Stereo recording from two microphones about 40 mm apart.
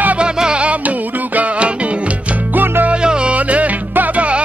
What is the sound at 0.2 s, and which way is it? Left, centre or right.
Music, right.